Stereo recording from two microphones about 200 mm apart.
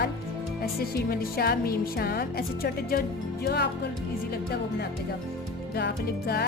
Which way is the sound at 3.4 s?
55° left (ahead or behind).